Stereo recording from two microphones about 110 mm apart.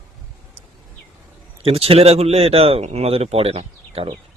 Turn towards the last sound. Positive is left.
turn(degrees=-60)  # may be behind; listen again after turning